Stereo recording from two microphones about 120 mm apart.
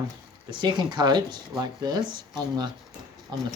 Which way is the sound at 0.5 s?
40° right (ahead or behind).